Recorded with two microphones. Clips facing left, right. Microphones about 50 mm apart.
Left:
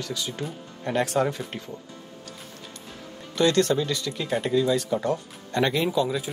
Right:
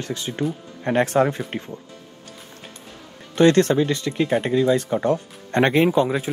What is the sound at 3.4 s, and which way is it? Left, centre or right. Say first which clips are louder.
Speech: right 6 dB; right.